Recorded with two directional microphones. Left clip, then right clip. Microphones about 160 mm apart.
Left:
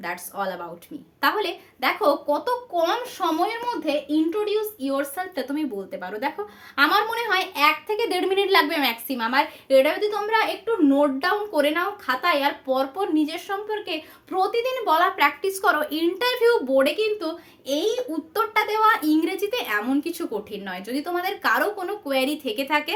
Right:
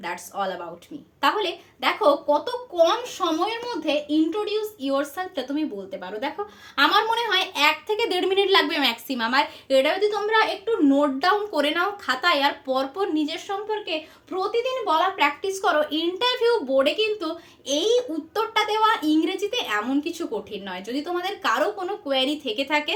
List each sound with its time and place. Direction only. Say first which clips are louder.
0.0 s a woman's voice: even; 20° left (ahead or behind)
4.9 s speech: right 1 dB; 30° left (ahead or behind)
6.7 s speech: right 1 dB; 10° left (ahead or behind); by 13.1 s 20° right (ahead or behind)
13.1 s a woman's voice: left 2 dB; 5° right (ahead or behind); by 17.2 s 30° left (ahead or behind)
18.3 s a woman's voice: even; 25° left (ahead or behind)